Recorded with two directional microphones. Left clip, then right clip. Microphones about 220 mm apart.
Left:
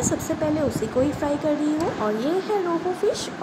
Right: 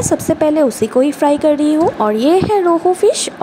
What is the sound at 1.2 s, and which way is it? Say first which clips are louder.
A woman's voice: right 11 dB; 30° right (ahead or behind).